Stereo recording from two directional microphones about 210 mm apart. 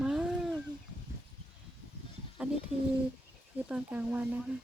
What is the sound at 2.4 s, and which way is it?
Speech, 5° right (ahead or behind).